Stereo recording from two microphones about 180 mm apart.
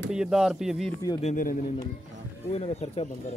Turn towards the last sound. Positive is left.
turn(degrees=35)  # may be behind; listen again after turning